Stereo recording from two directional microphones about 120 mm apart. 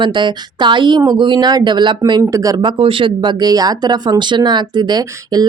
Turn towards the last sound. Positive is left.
turn(degrees=-35)  # may be behind; listen again after turning